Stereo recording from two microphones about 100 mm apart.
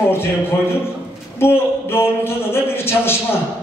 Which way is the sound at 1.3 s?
25° left (ahead or behind).